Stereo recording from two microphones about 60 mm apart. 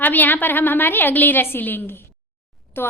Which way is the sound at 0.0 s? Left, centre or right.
Left.